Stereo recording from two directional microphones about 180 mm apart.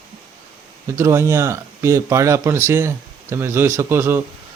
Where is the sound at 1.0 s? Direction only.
15° right (ahead or behind).